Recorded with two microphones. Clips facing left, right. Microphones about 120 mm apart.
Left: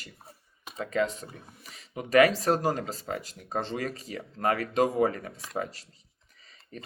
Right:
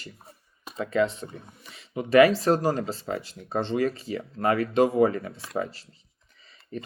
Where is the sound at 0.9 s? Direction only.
40° left (ahead or behind).